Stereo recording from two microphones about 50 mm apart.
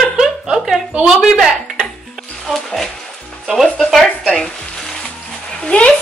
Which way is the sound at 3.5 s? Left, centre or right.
Centre.